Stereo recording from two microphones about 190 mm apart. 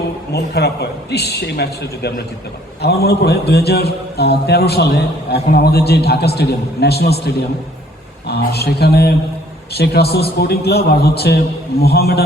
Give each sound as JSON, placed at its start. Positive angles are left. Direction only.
{"t": 0.3, "sound": "a man's voice", "side_deg": 60}